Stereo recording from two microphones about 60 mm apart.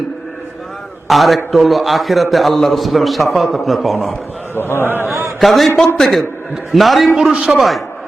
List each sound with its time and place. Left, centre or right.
1.0 s a man's voice: centre
4.5 s a man's voice: left
5.4 s a man's voice: centre
7.2 s a man's voice: centre